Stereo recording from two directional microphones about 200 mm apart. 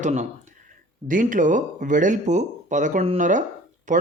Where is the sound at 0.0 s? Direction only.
35° right (ahead or behind).